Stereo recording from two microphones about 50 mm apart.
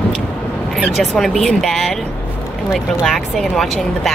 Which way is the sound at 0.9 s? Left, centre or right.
Centre.